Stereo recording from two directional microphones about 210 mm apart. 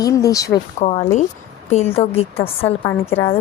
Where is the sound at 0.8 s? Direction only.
30° left (ahead or behind).